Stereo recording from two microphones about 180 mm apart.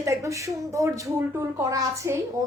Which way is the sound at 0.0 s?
15° right (ahead or behind).